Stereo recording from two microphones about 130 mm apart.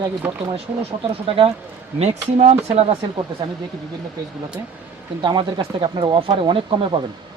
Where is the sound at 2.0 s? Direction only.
55° right (ahead or behind).